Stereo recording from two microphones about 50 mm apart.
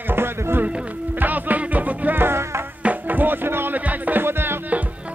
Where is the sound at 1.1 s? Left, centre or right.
Right.